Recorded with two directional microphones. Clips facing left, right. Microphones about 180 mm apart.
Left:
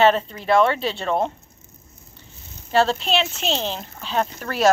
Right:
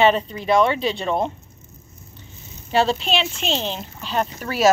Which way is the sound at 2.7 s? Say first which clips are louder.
Even; centre (ahead or behind).